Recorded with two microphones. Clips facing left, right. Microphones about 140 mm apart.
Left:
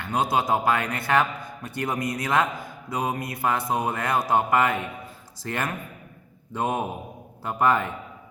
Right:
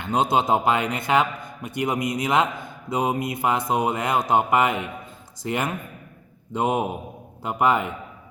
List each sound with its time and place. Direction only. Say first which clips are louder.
0.0 s a man's voice: right 3 dB; 25° right (ahead or behind)